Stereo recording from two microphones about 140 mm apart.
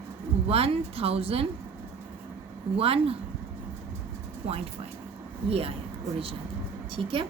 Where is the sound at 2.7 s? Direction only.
45° right (ahead or behind).